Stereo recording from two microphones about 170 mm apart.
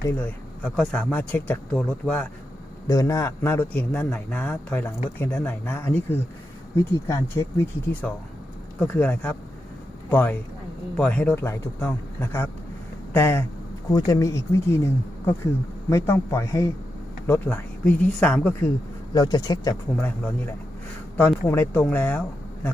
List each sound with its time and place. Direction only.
0.0 s speech: 10° left (ahead or behind)
2.8 s speech: 20° left (ahead or behind)
19.1 s speech: 25° left (ahead or behind)
20.0 s speech: 10° left (ahead or behind)